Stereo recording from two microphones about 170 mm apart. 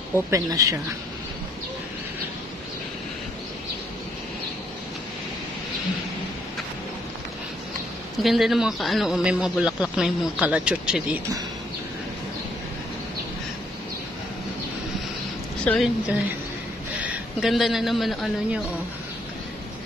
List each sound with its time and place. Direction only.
0.1 s speech: 20° right (ahead or behind)
8.2 s a man's voice: centre (ahead or behind)
15.6 s speech: 5° left (ahead or behind)
17.0 s a man's voice: 5° right (ahead or behind)